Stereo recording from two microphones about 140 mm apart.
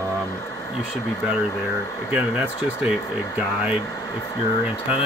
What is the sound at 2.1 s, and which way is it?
Speech, 10° right (ahead or behind).